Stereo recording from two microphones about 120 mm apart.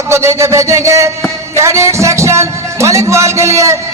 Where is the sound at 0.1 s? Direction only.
25° right (ahead or behind).